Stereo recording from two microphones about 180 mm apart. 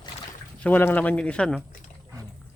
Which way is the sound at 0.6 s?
10° left (ahead or behind).